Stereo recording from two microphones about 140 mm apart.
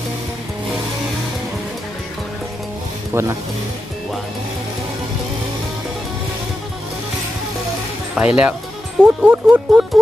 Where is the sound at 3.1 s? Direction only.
20° right (ahead or behind).